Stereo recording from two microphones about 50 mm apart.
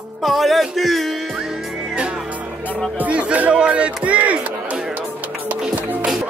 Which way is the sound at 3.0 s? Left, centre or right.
Right.